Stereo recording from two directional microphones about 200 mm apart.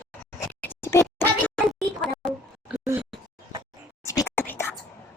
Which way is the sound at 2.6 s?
10° right (ahead or behind).